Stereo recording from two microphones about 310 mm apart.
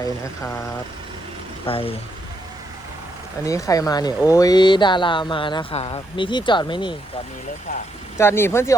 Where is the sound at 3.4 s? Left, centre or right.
Centre.